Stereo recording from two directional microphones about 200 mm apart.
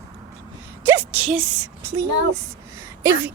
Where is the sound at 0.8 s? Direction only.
10° right (ahead or behind).